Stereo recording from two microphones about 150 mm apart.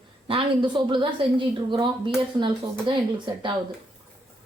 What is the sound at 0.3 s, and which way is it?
A woman's voice, 35° right (ahead or behind).